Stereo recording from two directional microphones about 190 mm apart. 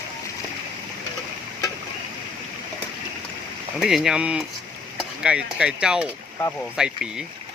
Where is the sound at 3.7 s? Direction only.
Centre (ahead or behind).